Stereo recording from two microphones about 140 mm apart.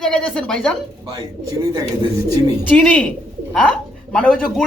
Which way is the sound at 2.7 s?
10° left (ahead or behind).